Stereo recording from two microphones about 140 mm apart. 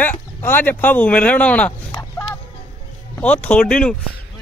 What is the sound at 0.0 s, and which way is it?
Speech, 15° left (ahead or behind).